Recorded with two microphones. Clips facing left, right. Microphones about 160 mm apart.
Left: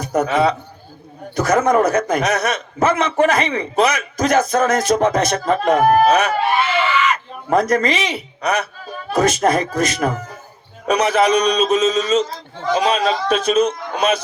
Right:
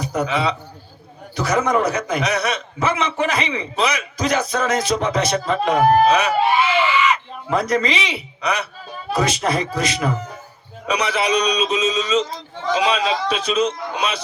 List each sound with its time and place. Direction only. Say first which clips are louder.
0.0 s a man's voice: left 4 dB; 50° left (ahead or behind)